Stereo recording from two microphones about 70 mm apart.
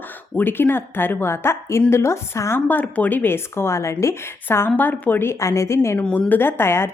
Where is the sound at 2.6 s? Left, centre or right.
Left.